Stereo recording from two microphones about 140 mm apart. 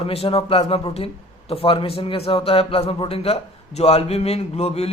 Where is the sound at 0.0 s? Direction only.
45° left (ahead or behind).